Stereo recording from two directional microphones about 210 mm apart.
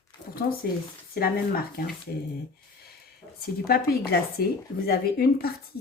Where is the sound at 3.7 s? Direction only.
45° left (ahead or behind).